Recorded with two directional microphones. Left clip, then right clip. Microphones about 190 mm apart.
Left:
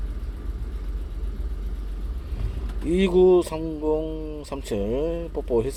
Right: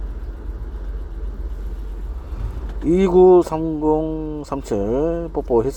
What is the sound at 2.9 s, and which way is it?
Speech, 20° right (ahead or behind).